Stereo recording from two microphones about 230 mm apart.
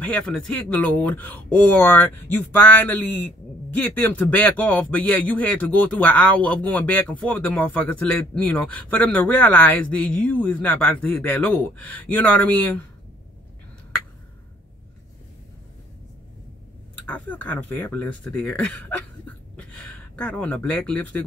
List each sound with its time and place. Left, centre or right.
0.1 s speech: centre
17.0 s speech: centre